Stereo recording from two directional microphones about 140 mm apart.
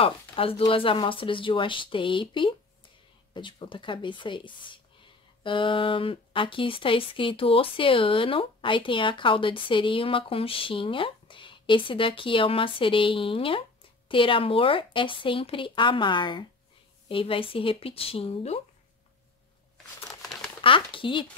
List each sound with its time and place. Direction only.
0.0 s speech: 40° left (ahead or behind)
20.2 s crumpling: centre (ahead or behind)
20.6 s speech: 40° left (ahead or behind)